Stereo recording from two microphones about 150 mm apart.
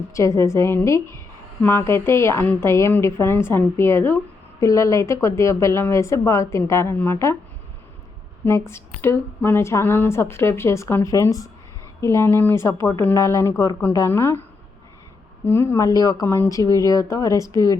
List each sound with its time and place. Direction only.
0.1 s a woman's voice: 20° left (ahead or behind)
8.4 s a woman's voice: 15° left (ahead or behind)
15.4 s a woman's voice: 15° left (ahead or behind)